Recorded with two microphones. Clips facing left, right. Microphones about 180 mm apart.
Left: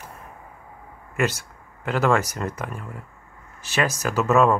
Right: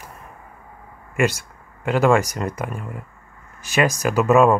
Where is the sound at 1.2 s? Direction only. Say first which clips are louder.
Right 4 dB; 10° right (ahead or behind).